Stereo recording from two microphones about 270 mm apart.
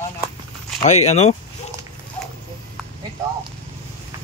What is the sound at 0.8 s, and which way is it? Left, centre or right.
Speech, left.